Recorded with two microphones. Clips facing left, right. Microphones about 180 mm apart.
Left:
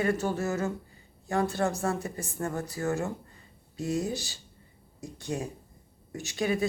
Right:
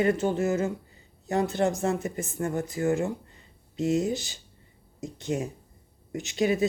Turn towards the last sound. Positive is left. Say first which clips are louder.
# right 4 dB
turn(degrees=-20)  # may be behind; listen again after turning